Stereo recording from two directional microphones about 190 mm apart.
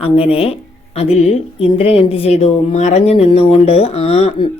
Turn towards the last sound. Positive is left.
turn(degrees=30)  # may be behind; listen again after turning